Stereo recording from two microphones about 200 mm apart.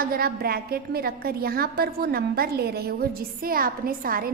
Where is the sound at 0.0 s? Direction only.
50° right (ahead or behind).